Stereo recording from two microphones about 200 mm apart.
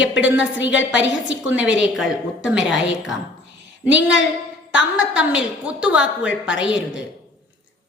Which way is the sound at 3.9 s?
70° left (ahead or behind).